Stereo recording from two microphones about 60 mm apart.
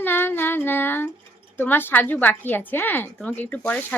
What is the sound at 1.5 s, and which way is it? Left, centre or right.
A woman's voice, left.